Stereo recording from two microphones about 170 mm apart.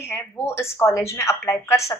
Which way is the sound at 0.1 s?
15° left (ahead or behind).